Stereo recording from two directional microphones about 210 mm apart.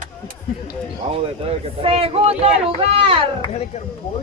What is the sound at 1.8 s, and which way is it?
Speech, 25° right (ahead or behind).